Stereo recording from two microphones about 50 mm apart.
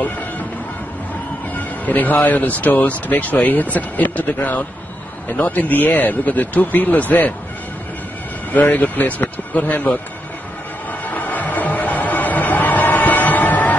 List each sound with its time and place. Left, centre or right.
1.5 s speech: left
8.5 s speech: left
10.9 s music: left